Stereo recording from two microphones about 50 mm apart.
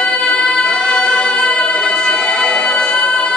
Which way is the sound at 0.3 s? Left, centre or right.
Centre.